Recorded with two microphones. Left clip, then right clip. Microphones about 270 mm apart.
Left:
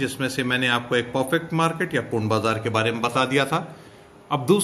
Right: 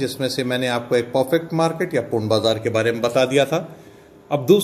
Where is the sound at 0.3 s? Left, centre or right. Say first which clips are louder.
Left 2 dB; centre.